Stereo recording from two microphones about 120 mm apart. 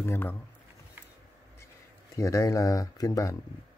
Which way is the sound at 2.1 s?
25° left (ahead or behind).